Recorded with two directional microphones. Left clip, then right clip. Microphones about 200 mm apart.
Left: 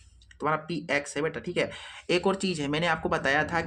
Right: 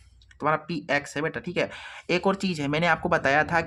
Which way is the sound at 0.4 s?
25° right (ahead or behind).